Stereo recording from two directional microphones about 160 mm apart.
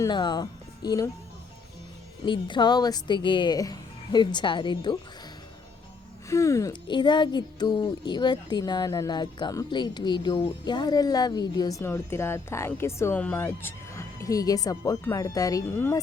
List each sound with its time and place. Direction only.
0.0 s speech: 30° left (ahead or behind)
2.2 s speech: 30° left (ahead or behind)
6.2 s speech: 20° left (ahead or behind)